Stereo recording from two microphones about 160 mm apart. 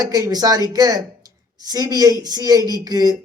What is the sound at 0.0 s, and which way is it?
Speech, 20° right (ahead or behind).